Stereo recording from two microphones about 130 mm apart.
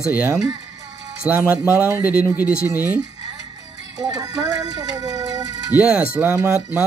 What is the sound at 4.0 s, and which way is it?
Speech, 25° right (ahead or behind).